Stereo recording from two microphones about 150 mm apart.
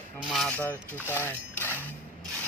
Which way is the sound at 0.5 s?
15° left (ahead or behind).